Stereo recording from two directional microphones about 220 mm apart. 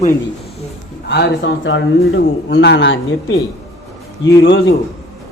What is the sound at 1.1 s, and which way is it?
A man's voice, 50° left (ahead or behind).